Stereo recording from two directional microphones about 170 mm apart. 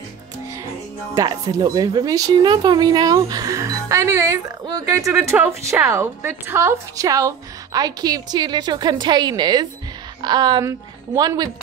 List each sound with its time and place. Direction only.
1.1 s a woman's voice: 20° right (ahead or behind)